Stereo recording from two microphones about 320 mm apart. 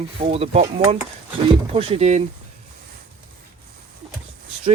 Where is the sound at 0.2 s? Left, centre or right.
Centre.